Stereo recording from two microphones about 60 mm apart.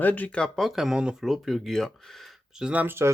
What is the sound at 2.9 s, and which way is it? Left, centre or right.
Speech, right.